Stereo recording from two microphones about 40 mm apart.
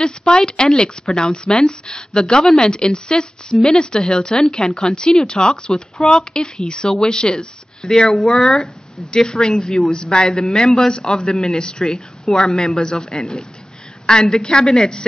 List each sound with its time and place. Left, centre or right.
0.0 s speech: centre